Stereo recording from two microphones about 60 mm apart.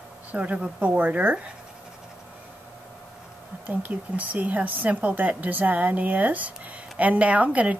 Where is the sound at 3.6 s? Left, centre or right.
Right.